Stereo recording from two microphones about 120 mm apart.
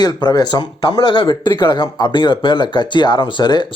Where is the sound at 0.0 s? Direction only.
35° left (ahead or behind).